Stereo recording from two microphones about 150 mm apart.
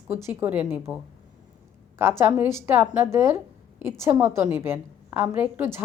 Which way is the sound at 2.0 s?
15° right (ahead or behind).